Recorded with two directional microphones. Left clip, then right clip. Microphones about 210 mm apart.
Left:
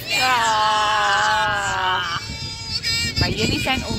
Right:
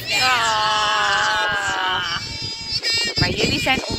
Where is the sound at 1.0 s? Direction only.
50° left (ahead or behind).